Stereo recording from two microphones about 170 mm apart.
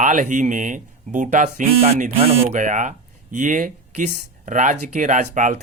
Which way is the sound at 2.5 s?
50° right (ahead or behind).